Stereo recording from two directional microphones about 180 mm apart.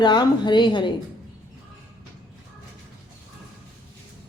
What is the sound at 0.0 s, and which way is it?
Speech, 25° left (ahead or behind).